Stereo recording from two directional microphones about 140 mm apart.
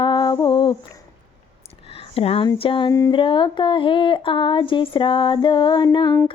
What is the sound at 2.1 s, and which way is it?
Speech, 45° left (ahead or behind).